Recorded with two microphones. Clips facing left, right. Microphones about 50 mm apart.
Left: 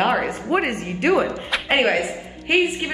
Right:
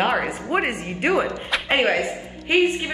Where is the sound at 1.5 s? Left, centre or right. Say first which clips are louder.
Left 1 dB; centre.